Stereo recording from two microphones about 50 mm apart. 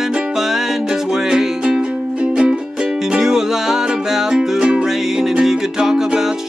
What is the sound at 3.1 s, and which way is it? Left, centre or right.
Music, centre.